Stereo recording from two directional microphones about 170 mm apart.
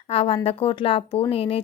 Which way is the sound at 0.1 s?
35° left (ahead or behind).